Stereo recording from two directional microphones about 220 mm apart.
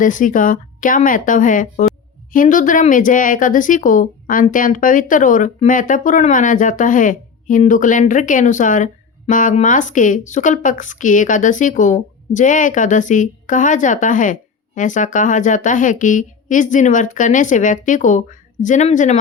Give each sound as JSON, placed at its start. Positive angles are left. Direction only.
{"t": 0.0, "sound": "speech", "side_deg": 35}